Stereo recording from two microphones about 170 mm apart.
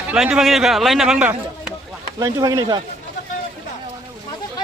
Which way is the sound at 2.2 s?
20° right (ahead or behind).